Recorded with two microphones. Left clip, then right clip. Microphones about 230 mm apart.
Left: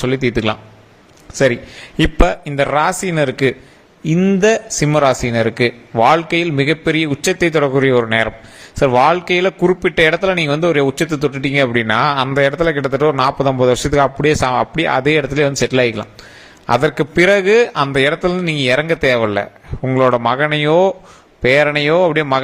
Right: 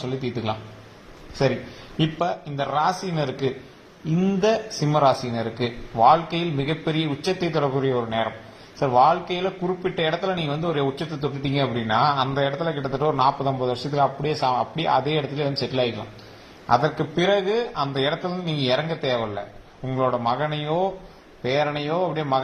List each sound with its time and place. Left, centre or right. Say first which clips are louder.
2.0 s speech: left 9 dB; left